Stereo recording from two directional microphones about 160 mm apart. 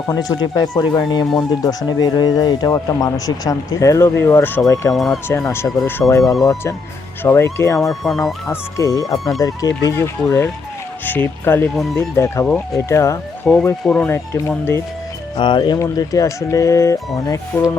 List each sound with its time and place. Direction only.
0.1 s speech: 25° left (ahead or behind)
4.9 s speech: centre (ahead or behind)
5.5 s speech: 15° left (ahead or behind)
6.2 s speech: centre (ahead or behind)
7.2 s speech: 15° left (ahead or behind)
7.8 s speech: centre (ahead or behind)
8.4 s speech: 20° left (ahead or behind)
9.1 s speech: centre (ahead or behind)
9.4 s speech: 20° left (ahead or behind)
12.5 s speech: 5° left (ahead or behind)
12.9 s speech: 15° left (ahead or behind)
13.5 s speech: 5° left (ahead or behind)
15.4 s speech: 30° left (ahead or behind)